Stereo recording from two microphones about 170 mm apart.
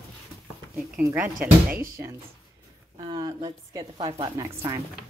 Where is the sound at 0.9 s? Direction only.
10° right (ahead or behind).